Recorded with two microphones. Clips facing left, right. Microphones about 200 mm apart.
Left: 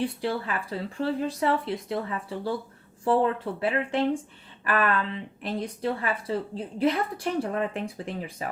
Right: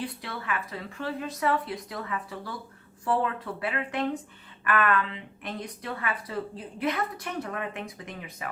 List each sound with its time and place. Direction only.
0.0 s speech: 30° left (ahead or behind)